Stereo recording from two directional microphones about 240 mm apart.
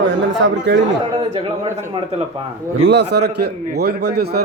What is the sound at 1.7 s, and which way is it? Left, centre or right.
Speech, centre.